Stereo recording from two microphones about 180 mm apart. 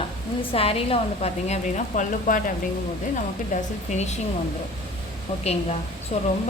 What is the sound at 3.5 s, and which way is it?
Speech, 45° left (ahead or behind).